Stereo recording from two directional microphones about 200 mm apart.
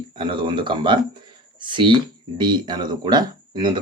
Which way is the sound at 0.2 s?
25° right (ahead or behind).